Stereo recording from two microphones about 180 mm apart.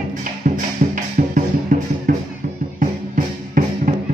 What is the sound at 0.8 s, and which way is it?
Music, 45° right (ahead or behind).